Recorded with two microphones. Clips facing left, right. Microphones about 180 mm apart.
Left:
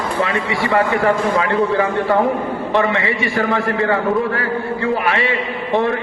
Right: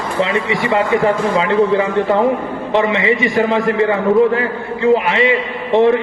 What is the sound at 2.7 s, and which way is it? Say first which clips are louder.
A man's voice: right 4 dB; 20° right (ahead or behind).